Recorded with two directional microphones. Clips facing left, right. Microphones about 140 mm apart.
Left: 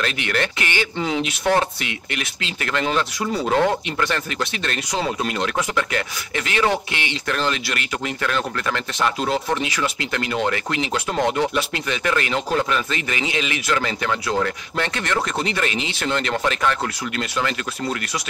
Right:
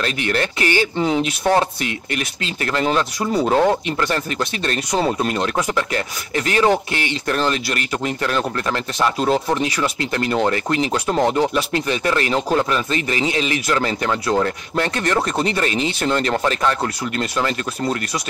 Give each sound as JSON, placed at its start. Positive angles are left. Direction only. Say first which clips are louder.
{"t": 0.0, "sound": "speech", "louder": "right 2 dB", "side_deg": -35}